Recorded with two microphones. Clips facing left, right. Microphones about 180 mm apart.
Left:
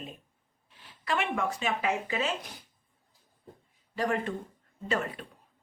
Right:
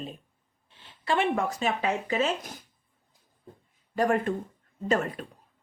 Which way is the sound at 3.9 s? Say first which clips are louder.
Right 5 dB; 45° right (ahead or behind).